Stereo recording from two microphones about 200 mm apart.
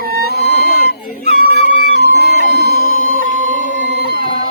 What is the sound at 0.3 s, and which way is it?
Music, 55° left (ahead or behind).